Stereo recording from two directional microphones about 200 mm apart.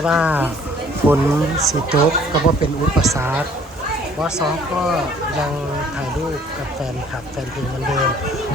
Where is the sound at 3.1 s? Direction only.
10° right (ahead or behind).